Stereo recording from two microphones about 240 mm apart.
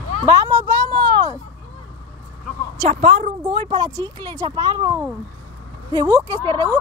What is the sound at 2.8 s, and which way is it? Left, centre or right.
A woman's voice, right.